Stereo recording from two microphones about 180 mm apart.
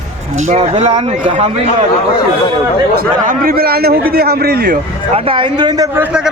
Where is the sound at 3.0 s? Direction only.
50° right (ahead or behind).